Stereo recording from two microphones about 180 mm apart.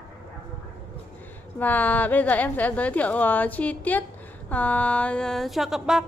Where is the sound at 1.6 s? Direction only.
10° left (ahead or behind).